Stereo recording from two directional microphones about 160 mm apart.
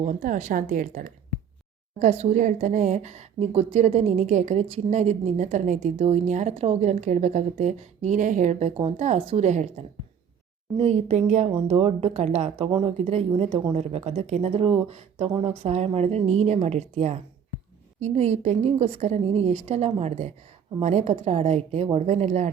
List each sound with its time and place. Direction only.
0.0 s a woman's voice: 50° right (ahead or behind)
2.0 s a woman's voice: 45° right (ahead or behind)